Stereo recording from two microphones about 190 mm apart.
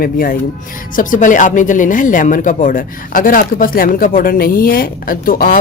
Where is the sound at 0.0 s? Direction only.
50° left (ahead or behind).